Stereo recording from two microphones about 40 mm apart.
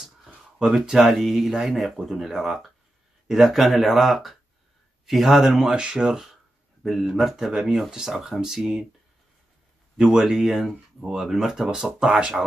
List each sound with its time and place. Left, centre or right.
0.6 s a man's voice: centre
6.8 s speech: centre
9.9 s speech: centre
10.2 s speech: centre